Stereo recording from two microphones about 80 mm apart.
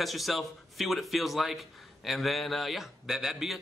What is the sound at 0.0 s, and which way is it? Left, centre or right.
A man's voice, centre.